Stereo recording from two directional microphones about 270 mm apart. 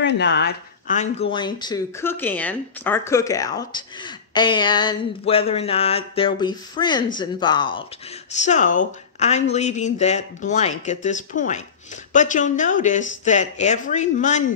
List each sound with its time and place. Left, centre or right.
0.0 s speech: left; by 7.8 s centre
8.4 s speech: left